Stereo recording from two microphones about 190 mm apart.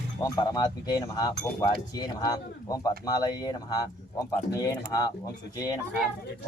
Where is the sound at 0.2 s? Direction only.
20° left (ahead or behind).